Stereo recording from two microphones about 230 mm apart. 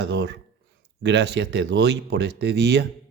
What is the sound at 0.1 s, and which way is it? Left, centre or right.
Speech, right.